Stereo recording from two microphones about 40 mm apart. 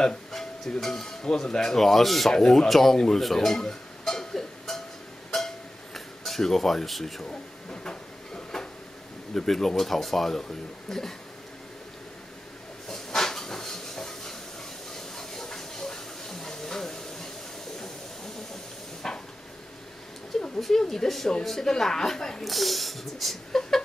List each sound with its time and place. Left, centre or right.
0.3 s speech: centre
1.8 s speech: centre
2.3 s speech: centre
3.2 s music: centre
5.9 s speech: centre
7.2 s a sound: left
9.3 s speech: centre
12.8 s a sound: centre
19.0 s a sound: centre
20.3 s a sound: centre
21.5 s speech: centre
22.4 s speech: centre